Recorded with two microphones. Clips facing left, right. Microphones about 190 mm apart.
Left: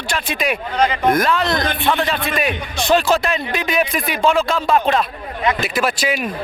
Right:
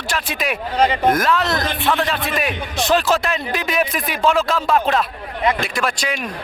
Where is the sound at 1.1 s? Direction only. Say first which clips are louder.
Left 1 dB; centre (ahead or behind).